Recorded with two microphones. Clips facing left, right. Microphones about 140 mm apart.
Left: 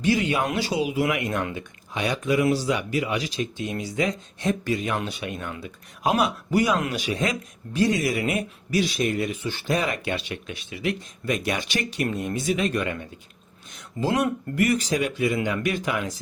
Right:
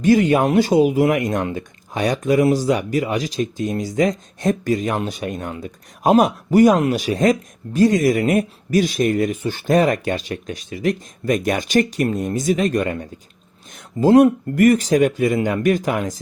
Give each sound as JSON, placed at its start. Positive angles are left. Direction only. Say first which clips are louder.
{"t": 0.0, "sound": "speech", "louder": "right 8 dB", "side_deg": -45}